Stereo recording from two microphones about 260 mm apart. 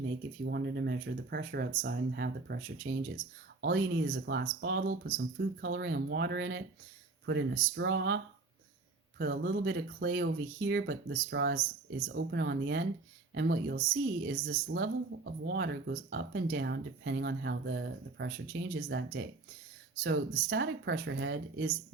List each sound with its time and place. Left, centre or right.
0.4 s speech: right